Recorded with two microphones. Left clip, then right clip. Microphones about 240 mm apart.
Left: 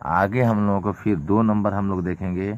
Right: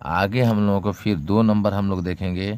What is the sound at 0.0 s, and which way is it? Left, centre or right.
Speech, right.